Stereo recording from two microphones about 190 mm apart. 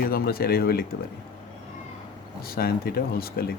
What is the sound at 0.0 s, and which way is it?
Speech, 50° left (ahead or behind).